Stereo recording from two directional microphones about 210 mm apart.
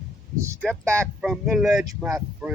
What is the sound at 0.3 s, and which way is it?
Speech, 15° right (ahead or behind).